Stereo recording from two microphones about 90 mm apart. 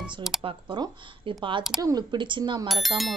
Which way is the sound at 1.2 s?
70° right (ahead or behind).